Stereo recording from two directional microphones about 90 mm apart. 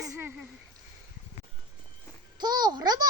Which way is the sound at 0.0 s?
35° right (ahead or behind).